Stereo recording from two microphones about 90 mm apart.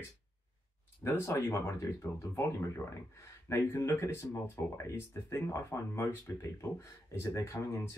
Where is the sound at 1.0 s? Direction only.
30° left (ahead or behind).